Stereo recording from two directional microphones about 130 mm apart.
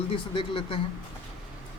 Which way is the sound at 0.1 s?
45° left (ahead or behind).